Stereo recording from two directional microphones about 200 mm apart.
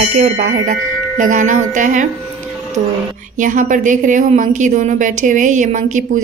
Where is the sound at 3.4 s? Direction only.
40° right (ahead or behind).